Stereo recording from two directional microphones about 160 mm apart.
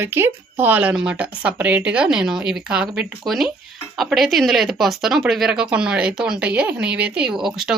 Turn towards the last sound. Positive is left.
turn(degrees=0)  # may be behind; listen again after turning